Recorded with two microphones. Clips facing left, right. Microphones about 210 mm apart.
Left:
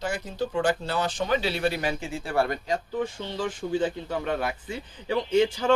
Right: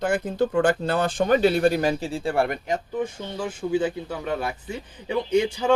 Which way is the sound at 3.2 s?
10° right (ahead or behind).